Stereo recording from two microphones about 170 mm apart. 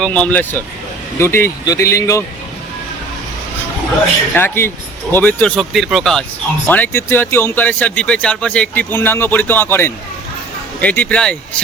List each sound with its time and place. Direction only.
0.0 s speech: 10° left (ahead or behind)
4.4 s speech: 15° left (ahead or behind)